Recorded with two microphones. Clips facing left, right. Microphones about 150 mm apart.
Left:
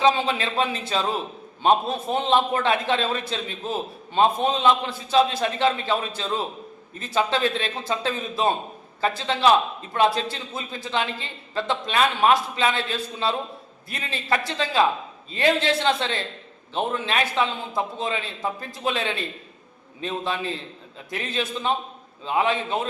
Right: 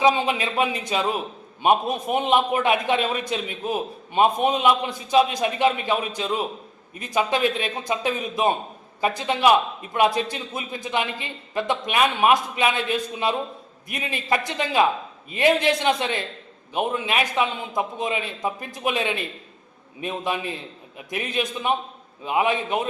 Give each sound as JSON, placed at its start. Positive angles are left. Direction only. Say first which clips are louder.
{"t": 0.0, "sound": "a man's voice", "louder": "right 1 dB", "side_deg": -15}